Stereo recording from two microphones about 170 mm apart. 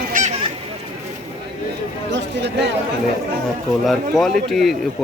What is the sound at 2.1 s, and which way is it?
Speech, 85° right.